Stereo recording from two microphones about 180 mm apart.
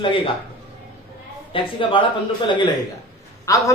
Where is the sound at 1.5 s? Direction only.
30° left (ahead or behind).